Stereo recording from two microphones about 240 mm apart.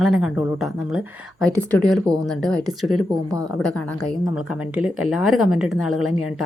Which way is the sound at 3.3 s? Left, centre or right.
Centre.